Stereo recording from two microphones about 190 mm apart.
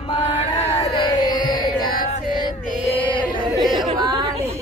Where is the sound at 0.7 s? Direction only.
25° left (ahead or behind).